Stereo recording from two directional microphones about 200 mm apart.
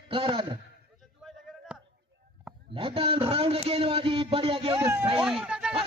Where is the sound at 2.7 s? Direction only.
25° right (ahead or behind).